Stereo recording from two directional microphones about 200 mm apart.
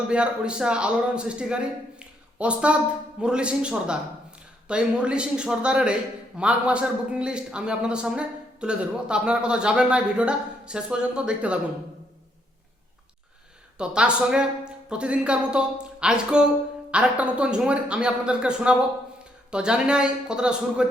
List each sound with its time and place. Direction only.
0.1 s speech: 5° right (ahead or behind)
13.7 s speech: 5° right (ahead or behind)